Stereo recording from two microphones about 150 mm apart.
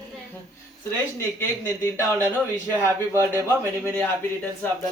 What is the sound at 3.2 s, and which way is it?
Speech, 20° right (ahead or behind).